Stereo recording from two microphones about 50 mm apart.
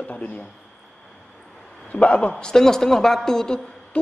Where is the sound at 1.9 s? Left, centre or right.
Left.